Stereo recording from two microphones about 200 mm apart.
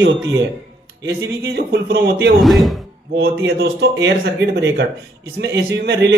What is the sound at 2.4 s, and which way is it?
Speech, centre (ahead or behind).